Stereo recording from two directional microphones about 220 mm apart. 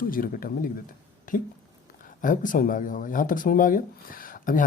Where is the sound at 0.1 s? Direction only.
40° left (ahead or behind).